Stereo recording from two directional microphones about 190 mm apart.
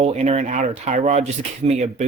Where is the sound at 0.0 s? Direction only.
35° right (ahead or behind).